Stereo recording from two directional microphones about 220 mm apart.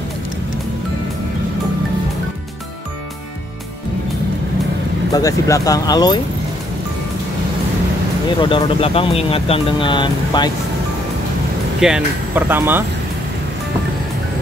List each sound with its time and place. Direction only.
5.1 s speech: 15° left (ahead or behind)
8.4 s speech: 20° left (ahead or behind)
11.8 s speech: 5° right (ahead or behind)